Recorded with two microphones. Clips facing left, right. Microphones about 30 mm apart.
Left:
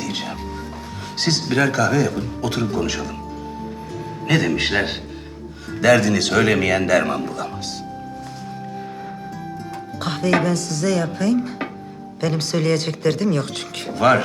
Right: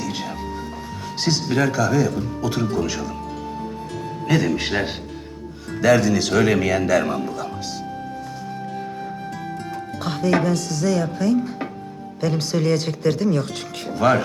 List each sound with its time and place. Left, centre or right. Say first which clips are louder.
0.0 s music: left 1 dB; centre
1.2 s speech: left 1 dB; centre
4.3 s speech: left 2 dB; centre
10.0 s speech: left 1 dB; centre